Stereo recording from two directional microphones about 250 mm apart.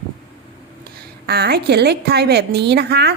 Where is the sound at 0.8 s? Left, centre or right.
Right.